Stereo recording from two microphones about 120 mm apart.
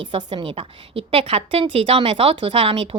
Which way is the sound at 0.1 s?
45° right (ahead or behind).